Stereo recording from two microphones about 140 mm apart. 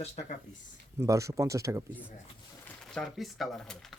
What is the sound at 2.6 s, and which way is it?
Speech, 5° left (ahead or behind).